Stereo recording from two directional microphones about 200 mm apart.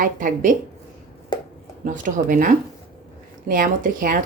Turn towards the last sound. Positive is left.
turn(degrees=-45)  # may be behind; listen again after turning